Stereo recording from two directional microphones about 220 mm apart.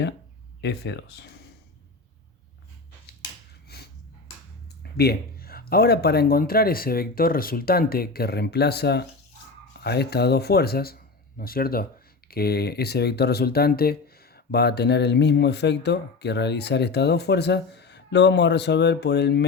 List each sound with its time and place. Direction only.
0.6 s speech: 50° left (ahead or behind)
3.7 s a sound: 45° left (ahead or behind)
4.8 s speech: 45° left (ahead or behind)